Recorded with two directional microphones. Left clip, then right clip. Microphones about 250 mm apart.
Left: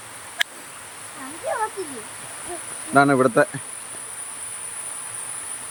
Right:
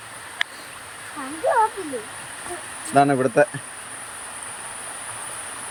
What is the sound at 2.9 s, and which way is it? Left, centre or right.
Speech, centre.